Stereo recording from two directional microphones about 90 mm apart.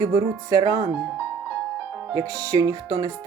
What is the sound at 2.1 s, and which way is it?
Music, 40° right (ahead or behind).